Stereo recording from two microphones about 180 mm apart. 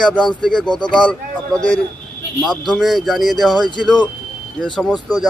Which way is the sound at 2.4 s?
Centre (ahead or behind).